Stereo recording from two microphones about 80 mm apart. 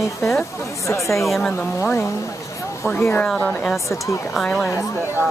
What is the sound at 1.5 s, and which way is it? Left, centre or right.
A woman's voice, left.